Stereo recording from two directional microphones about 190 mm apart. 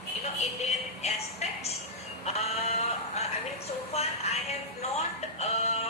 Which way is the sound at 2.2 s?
35° left (ahead or behind).